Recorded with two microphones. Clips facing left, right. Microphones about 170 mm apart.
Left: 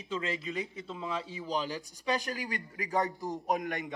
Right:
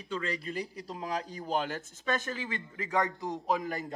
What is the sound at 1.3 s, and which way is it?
Speech, 45° right (ahead or behind).